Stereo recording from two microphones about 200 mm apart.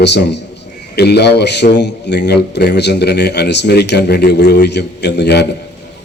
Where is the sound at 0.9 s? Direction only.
55° left (ahead or behind).